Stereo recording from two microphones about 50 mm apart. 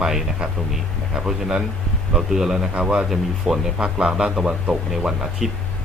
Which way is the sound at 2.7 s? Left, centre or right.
Centre.